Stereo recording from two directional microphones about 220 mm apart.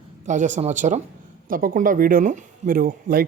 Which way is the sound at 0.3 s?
35° right (ahead or behind).